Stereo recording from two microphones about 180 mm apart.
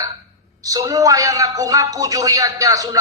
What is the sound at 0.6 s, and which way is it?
A man's voice, 20° right (ahead or behind).